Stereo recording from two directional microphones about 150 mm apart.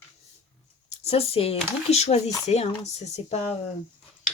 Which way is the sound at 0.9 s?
45° left (ahead or behind).